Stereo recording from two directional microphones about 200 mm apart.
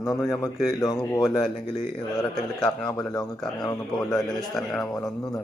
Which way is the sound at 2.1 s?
Centre (ahead or behind).